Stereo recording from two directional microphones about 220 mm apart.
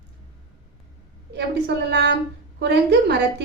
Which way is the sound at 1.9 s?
50° right (ahead or behind).